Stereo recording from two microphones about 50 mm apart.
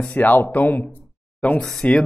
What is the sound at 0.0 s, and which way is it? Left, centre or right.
Speech, left.